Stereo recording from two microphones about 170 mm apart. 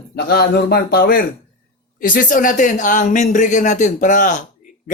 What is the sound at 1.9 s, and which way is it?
Speech, 55° left (ahead or behind).